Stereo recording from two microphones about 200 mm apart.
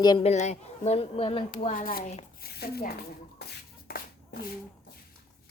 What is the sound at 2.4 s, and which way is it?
Speech, 50° left (ahead or behind).